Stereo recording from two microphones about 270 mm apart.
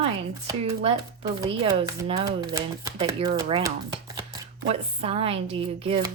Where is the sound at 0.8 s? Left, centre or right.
Centre.